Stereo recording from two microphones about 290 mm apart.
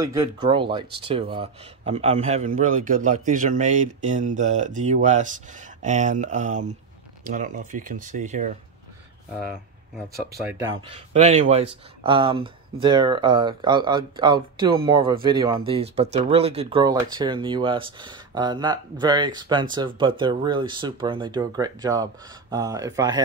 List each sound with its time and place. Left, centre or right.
0.0 s a man's voice: centre
9.9 s a man's voice: centre